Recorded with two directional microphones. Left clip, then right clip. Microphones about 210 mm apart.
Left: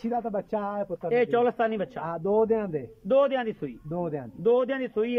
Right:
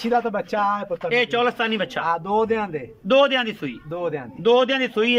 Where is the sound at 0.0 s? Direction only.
35° left (ahead or behind).